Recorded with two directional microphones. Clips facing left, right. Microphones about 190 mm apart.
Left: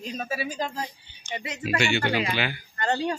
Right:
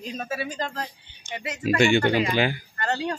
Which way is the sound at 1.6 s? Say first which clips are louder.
Right 6 dB; 50° right (ahead or behind).